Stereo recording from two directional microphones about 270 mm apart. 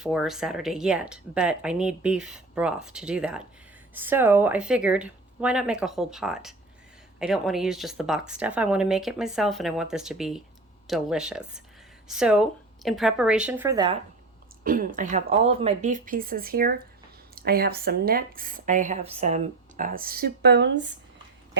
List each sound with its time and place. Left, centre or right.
0.0 s speech: centre
14.6 s speech: right